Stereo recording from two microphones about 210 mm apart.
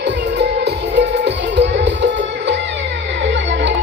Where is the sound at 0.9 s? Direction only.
55° right (ahead or behind).